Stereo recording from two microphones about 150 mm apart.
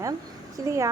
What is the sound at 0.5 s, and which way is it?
Speech, 20° right (ahead or behind).